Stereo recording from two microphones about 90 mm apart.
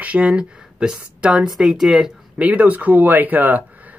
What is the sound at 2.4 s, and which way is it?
Speech, 15° right (ahead or behind).